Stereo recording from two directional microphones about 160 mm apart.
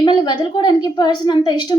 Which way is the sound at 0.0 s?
25° left (ahead or behind).